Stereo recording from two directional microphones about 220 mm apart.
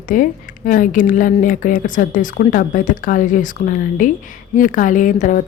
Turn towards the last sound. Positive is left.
turn(degrees=35)  # may be behind; listen again after turning